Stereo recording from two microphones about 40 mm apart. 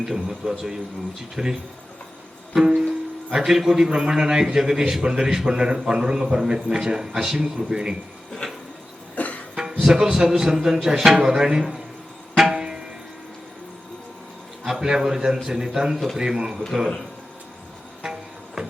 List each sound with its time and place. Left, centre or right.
0.0 s a man's voice: centre
2.6 s music: centre
3.3 s a man's voice: centre
8.4 s a sound: centre
9.1 s music: left
9.8 s a man's voice: centre
12.4 s music: centre
14.8 s a man's voice: centre
18.0 s music: centre